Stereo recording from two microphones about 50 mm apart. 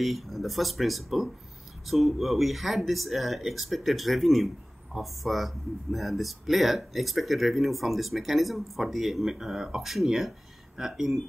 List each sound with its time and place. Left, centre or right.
0.0 s speech: centre